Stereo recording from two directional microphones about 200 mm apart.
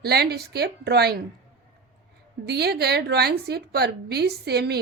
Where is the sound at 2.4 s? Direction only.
55° right (ahead or behind).